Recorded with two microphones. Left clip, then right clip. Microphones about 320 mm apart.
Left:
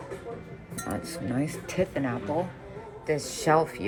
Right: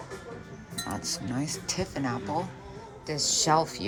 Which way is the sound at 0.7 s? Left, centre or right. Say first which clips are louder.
Right 1 dB; centre.